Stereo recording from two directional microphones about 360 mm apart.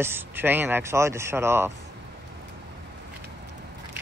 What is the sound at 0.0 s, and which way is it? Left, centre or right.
Speech, centre.